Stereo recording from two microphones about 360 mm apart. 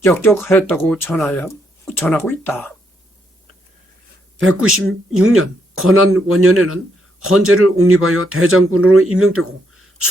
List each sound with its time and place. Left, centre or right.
0.0 s speech: centre
4.4 s speech: right